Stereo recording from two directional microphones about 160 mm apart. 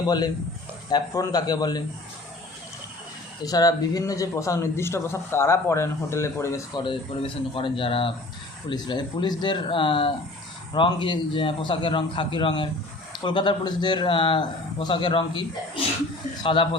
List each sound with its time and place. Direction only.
0.9 s a man's voice: 25° left (ahead or behind)
3.4 s a man's voice: 25° left (ahead or behind)